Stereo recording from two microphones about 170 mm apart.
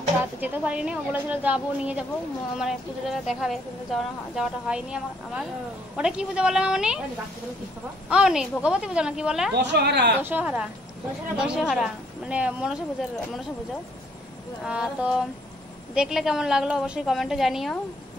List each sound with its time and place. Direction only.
0.4 s speech: 5° right (ahead or behind)
8.1 s speech: 5° right (ahead or behind)
9.6 s a woman's voice: 90° right
10.2 s speech: 10° right (ahead or behind)
14.6 s speech: 5° right (ahead or behind)